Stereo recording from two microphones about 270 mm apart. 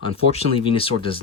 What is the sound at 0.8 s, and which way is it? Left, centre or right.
Speech, centre.